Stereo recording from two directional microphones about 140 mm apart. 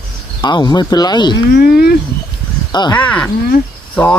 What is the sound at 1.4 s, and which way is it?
Speech, 90° left.